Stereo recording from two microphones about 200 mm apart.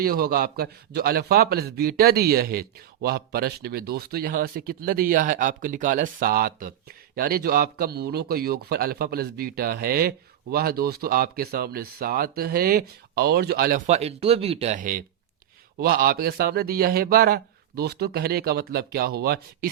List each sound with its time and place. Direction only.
0.0 s a man's voice: 50° right (ahead or behind)